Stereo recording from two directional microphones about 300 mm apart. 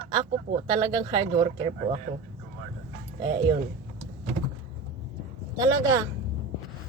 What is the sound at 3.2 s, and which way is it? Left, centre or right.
Speech, centre.